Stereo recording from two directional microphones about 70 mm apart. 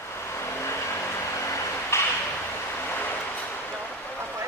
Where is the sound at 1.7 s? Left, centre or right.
Left.